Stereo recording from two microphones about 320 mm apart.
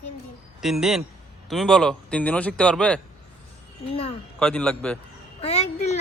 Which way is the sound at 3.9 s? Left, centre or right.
Centre.